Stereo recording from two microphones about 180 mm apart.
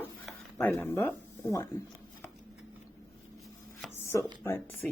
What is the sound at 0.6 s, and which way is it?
Speech, 10° left (ahead or behind).